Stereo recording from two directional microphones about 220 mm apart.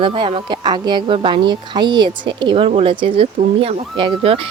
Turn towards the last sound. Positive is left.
turn(degrees=-25)  # may be behind; listen again after turning